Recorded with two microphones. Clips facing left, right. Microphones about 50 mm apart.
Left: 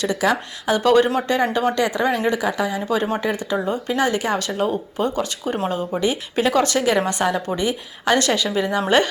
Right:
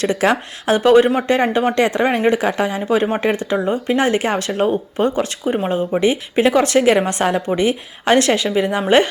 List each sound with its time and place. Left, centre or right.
0.0 s speech: right
0.9 s speech: right
2.8 s a woman's voice: right